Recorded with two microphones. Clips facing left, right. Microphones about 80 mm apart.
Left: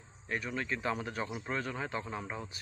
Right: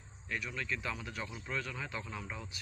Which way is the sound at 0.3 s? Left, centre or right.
Left.